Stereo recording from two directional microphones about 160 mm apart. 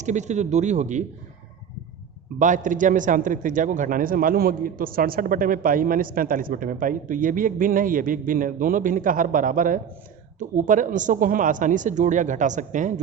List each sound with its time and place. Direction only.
0.0 s speech: 50° right (ahead or behind)
2.4 s a man's voice: 50° right (ahead or behind)